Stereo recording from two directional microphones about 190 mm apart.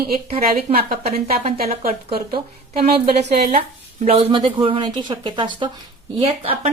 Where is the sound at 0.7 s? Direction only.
35° right (ahead or behind).